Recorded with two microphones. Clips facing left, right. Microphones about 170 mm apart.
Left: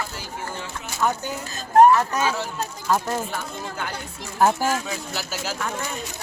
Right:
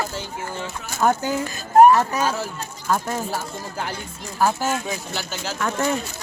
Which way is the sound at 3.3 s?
35° right (ahead or behind).